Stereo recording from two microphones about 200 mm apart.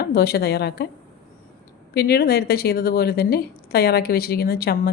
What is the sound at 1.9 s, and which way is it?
Speech, 50° left (ahead or behind).